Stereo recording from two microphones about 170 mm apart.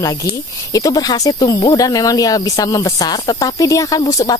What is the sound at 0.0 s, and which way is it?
Speech, 20° left (ahead or behind).